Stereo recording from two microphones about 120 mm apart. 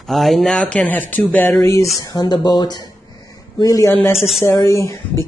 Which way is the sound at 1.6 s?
25° left (ahead or behind).